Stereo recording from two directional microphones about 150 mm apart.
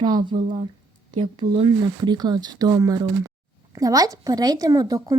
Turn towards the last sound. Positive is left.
turn(degrees=-25)  # may be behind; listen again after turning